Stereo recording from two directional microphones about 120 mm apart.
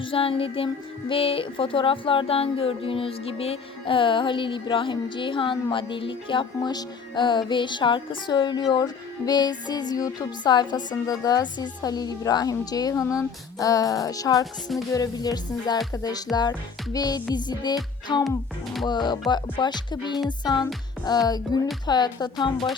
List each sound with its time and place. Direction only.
0.0 s music: 50° left (ahead or behind)
18.1 s speech: 30° left (ahead or behind)
18.9 s music: 35° left (ahead or behind)